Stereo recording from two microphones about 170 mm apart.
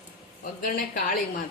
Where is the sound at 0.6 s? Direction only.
55° left (ahead or behind).